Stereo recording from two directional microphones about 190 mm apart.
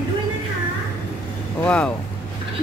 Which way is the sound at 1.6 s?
5° left (ahead or behind).